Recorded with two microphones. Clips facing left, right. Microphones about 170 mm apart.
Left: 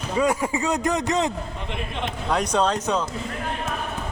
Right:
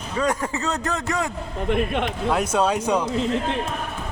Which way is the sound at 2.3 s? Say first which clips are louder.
Even; 5° right (ahead or behind).